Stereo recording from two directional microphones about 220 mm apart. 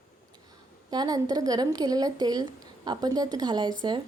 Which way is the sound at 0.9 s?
15° right (ahead or behind).